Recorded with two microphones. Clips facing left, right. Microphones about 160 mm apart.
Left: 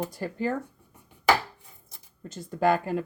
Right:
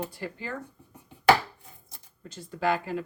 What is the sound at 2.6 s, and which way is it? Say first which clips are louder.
Speech: left 4 dB; 45° left (ahead or behind).